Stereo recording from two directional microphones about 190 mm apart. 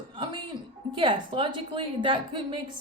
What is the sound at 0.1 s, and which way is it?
Music, 25° right (ahead or behind).